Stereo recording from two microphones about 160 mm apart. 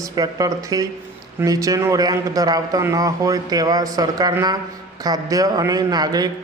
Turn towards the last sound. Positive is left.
turn(degrees=-25)  # may be behind; listen again after turning